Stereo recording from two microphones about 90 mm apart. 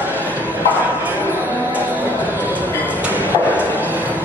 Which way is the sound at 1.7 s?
20° right (ahead or behind).